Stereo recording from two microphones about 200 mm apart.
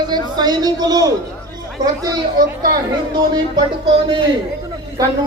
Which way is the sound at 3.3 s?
20° right (ahead or behind).